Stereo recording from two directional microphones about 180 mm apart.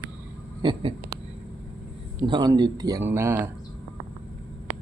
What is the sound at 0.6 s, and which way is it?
Speech, 25° right (ahead or behind).